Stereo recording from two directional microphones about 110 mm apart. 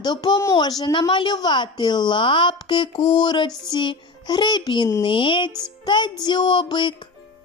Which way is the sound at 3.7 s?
45° left (ahead or behind).